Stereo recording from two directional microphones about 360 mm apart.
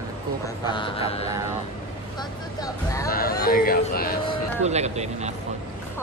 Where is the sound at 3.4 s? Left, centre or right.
Left.